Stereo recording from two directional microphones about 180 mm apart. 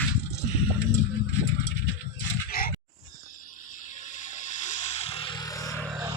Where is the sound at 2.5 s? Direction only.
55° left (ahead or behind).